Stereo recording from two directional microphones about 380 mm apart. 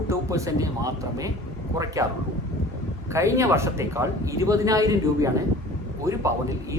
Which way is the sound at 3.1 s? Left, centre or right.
Centre.